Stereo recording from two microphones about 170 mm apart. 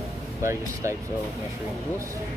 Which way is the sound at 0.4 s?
15° right (ahead or behind).